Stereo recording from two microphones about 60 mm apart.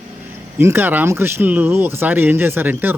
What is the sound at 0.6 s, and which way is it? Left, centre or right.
Speech, right.